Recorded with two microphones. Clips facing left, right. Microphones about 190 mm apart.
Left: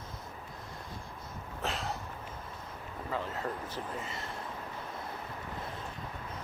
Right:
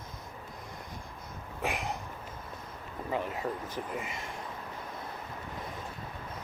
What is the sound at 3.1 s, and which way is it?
Speech, 15° right (ahead or behind).